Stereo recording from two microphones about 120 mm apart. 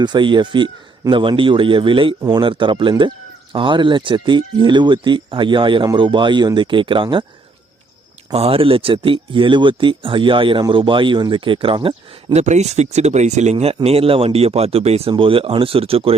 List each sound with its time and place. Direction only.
0.0 s speech: 40° right (ahead or behind)
8.3 s speech: 50° right (ahead or behind)
12.4 s speech: 70° right (ahead or behind)
13.8 s speech: 55° right (ahead or behind)
15.1 s speech: 50° right (ahead or behind)